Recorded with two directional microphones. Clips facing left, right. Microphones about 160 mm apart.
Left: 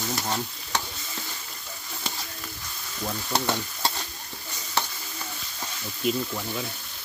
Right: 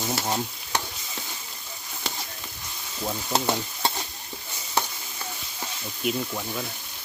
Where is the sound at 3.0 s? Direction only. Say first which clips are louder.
Right 1 dB; 20° right (ahead or behind).